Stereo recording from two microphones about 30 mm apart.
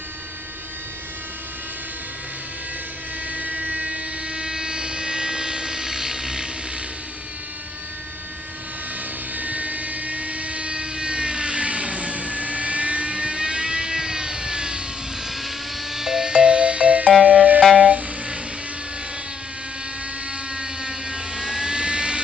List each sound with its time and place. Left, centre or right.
3.3 s vehicle: right
4.4 s vehicle: right
9.3 s vehicle: right
15.2 s vehicle: centre
16.3 s music: right
17.7 s a sound: right
20.5 s vehicle: right